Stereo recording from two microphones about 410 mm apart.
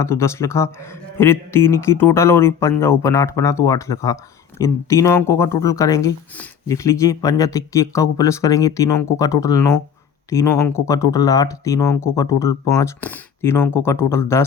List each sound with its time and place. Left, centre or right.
0.0 s speech: centre